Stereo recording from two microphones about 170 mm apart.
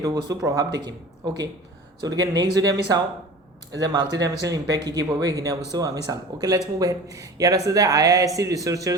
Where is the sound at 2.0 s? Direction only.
25° right (ahead or behind).